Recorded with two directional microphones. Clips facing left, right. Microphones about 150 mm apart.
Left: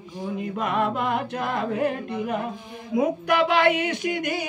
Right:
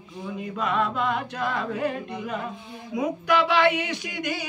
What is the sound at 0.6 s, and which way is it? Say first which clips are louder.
Music: even; 55° left (ahead or behind).